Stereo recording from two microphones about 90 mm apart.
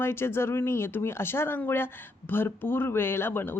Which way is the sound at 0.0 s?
25° left (ahead or behind).